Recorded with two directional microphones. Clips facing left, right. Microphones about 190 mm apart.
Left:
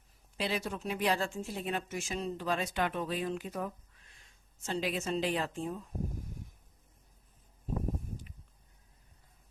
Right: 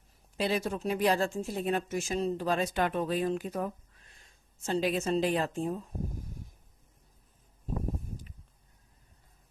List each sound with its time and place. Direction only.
0.3 s speech: 45° right (ahead or behind)